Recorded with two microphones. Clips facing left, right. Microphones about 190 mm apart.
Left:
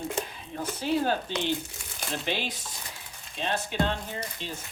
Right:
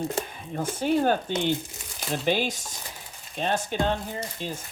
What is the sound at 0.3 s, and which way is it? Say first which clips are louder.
Speech: right 4 dB; 50° right (ahead or behind).